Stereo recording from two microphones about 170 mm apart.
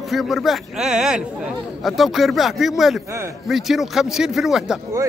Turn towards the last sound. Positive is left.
turn(degrees=0)  # may be behind; listen again after turning